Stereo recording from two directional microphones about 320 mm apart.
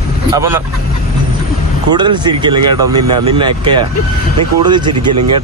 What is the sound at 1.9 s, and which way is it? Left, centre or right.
Speech, centre.